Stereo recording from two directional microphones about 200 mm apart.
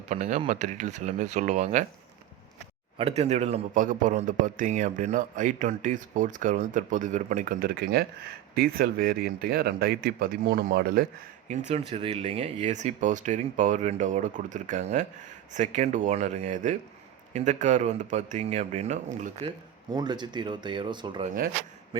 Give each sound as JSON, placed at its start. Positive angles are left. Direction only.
{"t": 0.1, "sound": "a man's voice", "side_deg": -35}
{"t": 3.0, "sound": "a man's voice", "side_deg": -30}
{"t": 11.4, "sound": "a man's voice", "side_deg": -35}
{"t": 21.2, "sound": "speech", "side_deg": -45}